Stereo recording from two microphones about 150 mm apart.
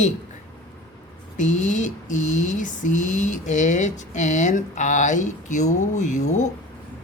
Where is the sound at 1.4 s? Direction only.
55° left (ahead or behind).